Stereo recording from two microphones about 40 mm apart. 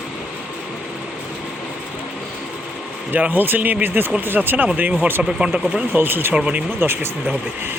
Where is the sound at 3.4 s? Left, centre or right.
Right.